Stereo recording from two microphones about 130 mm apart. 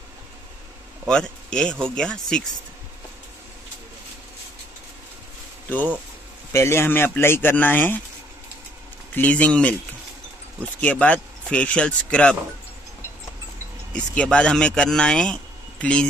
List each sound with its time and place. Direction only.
1.0 s speech: 5° left (ahead or behind)
6.5 s speech: 20° left (ahead or behind)
9.1 s speech: 10° left (ahead or behind)
13.9 s speech: 10° left (ahead or behind)